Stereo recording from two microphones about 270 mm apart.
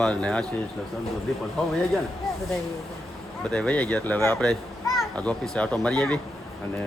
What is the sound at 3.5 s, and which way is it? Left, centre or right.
A child's voice, centre.